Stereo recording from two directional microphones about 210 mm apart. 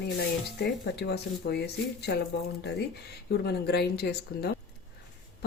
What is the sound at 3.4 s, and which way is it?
Speech, 50° left (ahead or behind).